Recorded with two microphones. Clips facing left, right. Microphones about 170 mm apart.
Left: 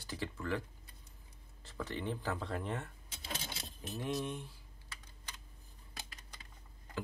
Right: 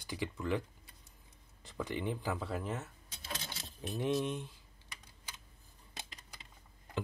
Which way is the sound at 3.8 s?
20° right (ahead or behind).